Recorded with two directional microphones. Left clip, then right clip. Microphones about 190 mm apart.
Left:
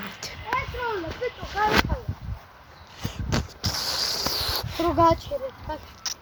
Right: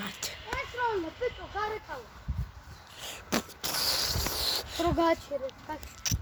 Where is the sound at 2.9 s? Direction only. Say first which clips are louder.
Left 2 dB; 15° right (ahead or behind).